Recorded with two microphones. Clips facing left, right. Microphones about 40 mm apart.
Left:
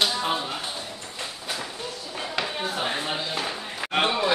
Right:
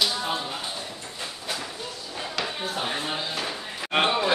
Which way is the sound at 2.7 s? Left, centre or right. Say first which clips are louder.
Left 1 dB; centre.